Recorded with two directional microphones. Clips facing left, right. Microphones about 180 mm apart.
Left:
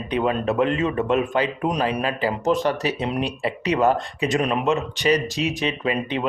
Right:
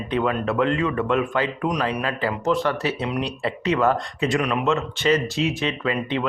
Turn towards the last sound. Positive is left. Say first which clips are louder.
# even
turn(degrees=20)  # may be behind; listen again after turning